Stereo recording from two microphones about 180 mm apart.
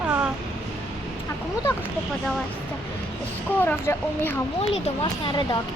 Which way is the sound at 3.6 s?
10° left (ahead or behind).